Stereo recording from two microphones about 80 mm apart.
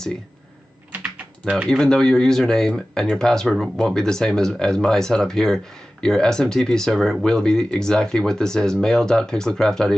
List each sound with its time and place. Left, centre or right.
0.9 s typing: centre
1.7 s speech: centre